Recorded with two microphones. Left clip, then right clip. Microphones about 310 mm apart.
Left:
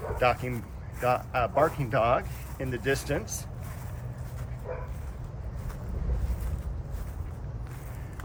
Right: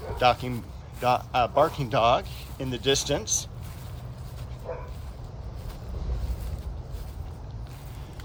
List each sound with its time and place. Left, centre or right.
0.2 s speech: centre
4.7 s dog: right